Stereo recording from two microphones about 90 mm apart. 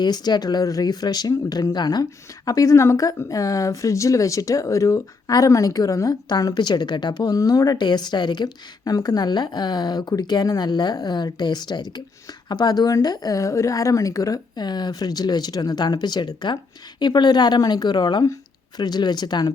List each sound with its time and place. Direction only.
0.0 s speech: 50° left (ahead or behind)
2.5 s speech: 35° left (ahead or behind)